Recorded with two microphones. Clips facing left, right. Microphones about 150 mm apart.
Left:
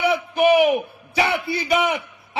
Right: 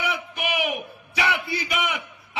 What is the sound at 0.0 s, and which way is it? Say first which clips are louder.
A man's voice: left 11 dB; 30° left (ahead or behind).